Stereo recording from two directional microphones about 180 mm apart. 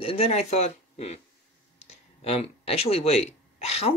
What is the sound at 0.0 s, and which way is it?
A woman's voice, 35° left (ahead or behind).